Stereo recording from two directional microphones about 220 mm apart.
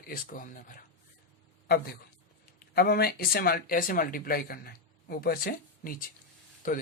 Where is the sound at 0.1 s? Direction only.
40° left (ahead or behind).